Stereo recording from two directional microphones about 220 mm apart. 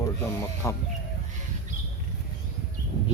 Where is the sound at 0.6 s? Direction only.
15° left (ahead or behind).